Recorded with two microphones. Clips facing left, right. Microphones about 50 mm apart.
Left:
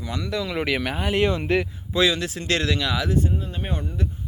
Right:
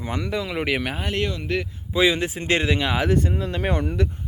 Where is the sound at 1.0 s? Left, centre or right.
Centre.